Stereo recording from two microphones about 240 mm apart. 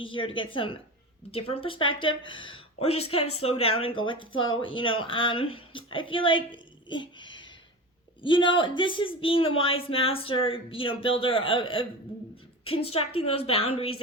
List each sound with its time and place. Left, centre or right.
0.0 s speech: left